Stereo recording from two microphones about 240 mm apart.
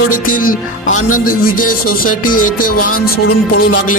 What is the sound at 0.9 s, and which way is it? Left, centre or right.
Speech, left.